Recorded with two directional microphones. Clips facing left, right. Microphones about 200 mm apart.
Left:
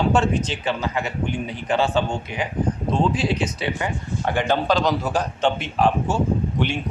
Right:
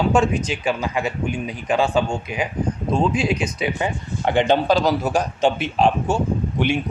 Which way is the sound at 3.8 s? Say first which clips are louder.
Right 2 dB; 20° right (ahead or behind).